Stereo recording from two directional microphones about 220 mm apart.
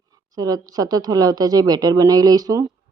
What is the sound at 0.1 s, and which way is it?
A woman's voice, 15° right (ahead or behind).